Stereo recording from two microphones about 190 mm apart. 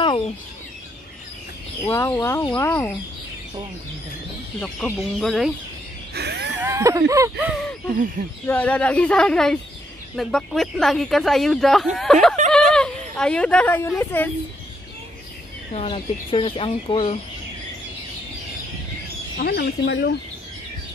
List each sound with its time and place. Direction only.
1.9 s speech: 10° left (ahead or behind)
4.6 s speech: 5° left (ahead or behind)
6.1 s a sound: 60° right (ahead or behind)
6.6 s speech: 15° right (ahead or behind)
7.9 s speech: 50° right (ahead or behind)
8.5 s speech: 10° left (ahead or behind)
15.7 s speech: 30° left (ahead or behind)
19.3 s speech: 60° left (ahead or behind)